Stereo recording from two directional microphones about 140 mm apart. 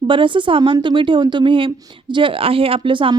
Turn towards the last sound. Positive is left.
turn(degrees=-35)  # may be behind; listen again after turning